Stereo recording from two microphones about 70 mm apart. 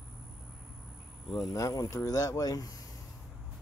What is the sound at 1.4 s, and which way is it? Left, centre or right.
Speech, left.